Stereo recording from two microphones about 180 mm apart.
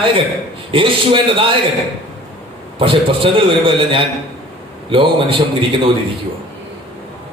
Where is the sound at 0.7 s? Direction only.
30° right (ahead or behind).